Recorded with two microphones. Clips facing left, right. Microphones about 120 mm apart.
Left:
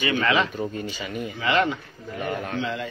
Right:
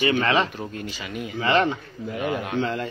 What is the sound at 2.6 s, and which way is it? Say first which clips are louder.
Speech: right 3 dB; 45° right (ahead or behind).